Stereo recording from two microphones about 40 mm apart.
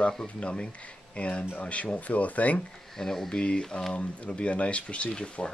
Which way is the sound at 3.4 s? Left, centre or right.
Left.